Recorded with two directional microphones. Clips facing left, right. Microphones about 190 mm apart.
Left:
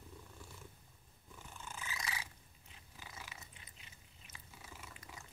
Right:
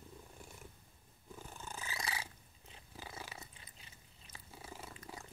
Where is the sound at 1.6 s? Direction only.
35° right (ahead or behind).